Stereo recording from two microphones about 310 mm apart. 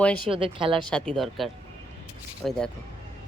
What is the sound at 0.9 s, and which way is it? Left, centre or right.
Speech, centre.